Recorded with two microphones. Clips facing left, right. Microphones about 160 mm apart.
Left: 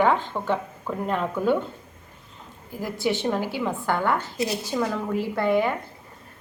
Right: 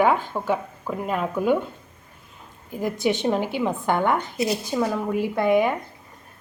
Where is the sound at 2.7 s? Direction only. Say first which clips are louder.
Right 3 dB; 20° right (ahead or behind).